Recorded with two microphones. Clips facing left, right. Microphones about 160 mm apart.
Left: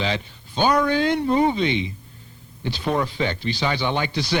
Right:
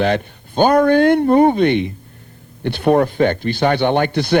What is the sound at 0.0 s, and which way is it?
Speech, 55° right (ahead or behind).